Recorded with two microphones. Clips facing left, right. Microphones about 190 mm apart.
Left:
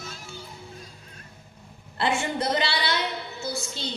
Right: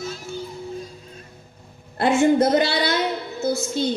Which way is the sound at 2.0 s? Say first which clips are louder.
Right 10 dB; 45° right (ahead or behind).